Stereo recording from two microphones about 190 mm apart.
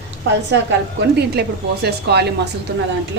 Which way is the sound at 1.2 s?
60° right (ahead or behind).